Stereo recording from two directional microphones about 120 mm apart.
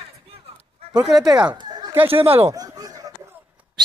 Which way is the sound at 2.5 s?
30° right (ahead or behind).